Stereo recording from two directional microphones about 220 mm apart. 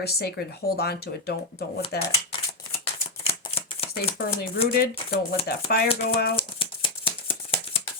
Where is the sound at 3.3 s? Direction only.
25° left (ahead or behind).